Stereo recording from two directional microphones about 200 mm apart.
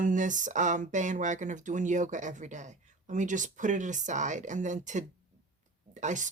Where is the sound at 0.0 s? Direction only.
40° right (ahead or behind).